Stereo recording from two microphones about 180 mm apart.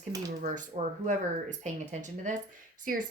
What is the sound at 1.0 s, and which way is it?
A woman's voice, 40° right (ahead or behind).